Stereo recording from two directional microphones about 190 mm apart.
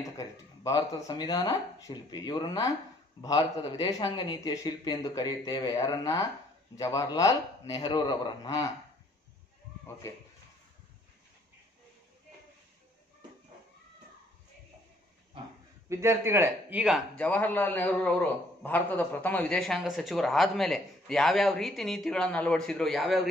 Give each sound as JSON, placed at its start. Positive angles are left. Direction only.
{"t": 0.2, "sound": "a man's voice", "side_deg": 20}
{"t": 10.0, "sound": "speech", "side_deg": 15}
{"t": 15.9, "sound": "speech", "side_deg": -15}